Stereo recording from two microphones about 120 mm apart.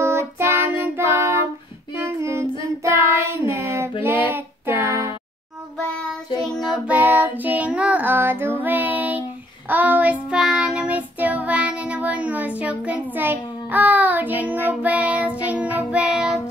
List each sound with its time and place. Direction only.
0.0 s child singing: 20° right (ahead or behind)
4.8 s a sound: 25° right (ahead or behind)
6.4 s child singing: 5° left (ahead or behind)
6.9 s child singing: 15° right (ahead or behind)